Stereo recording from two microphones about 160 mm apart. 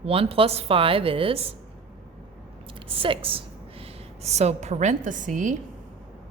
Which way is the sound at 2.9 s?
35° right (ahead or behind).